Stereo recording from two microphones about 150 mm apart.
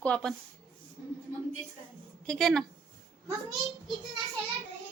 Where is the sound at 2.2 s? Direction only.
5° left (ahead or behind).